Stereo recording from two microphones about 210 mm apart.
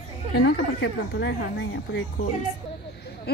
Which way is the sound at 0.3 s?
50° left (ahead or behind).